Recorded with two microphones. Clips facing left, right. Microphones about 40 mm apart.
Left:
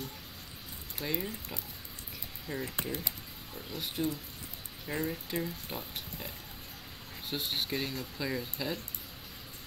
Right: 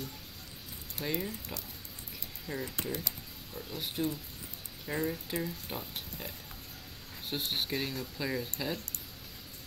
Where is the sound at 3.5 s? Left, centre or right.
Centre.